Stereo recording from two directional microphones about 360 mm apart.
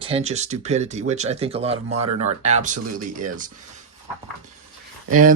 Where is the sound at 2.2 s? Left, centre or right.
Centre.